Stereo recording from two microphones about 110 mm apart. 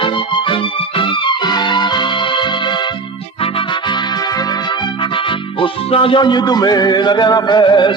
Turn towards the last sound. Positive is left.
turn(degrees=45)  # may be behind; listen again after turning